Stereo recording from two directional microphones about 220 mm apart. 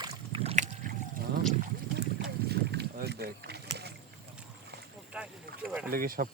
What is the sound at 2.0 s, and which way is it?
Boat, 45° right (ahead or behind).